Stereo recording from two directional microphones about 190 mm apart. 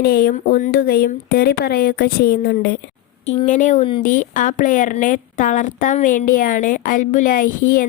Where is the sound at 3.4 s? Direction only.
40° left (ahead or behind).